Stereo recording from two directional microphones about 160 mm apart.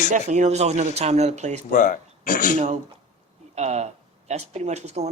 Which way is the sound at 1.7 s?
55° left (ahead or behind).